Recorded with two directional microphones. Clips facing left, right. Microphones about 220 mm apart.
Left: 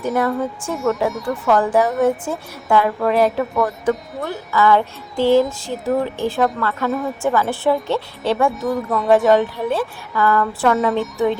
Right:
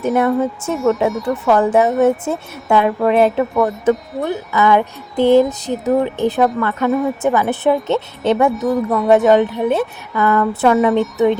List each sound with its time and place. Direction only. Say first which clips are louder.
0.2 s music: right 4 dB; 25° right (ahead or behind)